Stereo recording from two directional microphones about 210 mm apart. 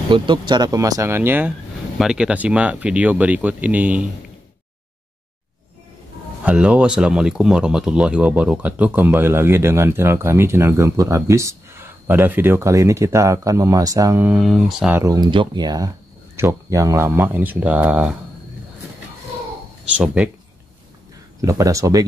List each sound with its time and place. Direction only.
0.1 s speech: 20° right (ahead or behind); by 4.0 s 5° right (ahead or behind)
6.4 s speech: 5° right (ahead or behind)
15.0 s speech: 20° right (ahead or behind)
19.9 s speech: 5° right (ahead or behind)
21.4 s speech: 15° right (ahead or behind)